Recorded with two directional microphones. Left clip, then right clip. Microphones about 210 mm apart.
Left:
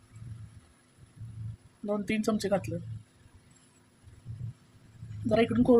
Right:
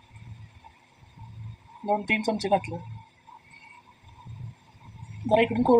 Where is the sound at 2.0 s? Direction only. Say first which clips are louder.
Right 5 dB; 20° left (ahead or behind).